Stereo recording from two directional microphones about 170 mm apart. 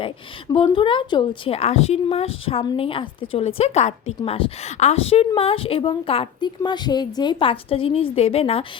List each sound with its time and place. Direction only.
0.5 s a woman's voice: 30° left (ahead or behind)